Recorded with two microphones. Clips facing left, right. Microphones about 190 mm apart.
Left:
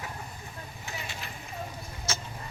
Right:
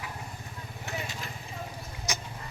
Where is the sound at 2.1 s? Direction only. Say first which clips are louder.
Even; 15° right (ahead or behind).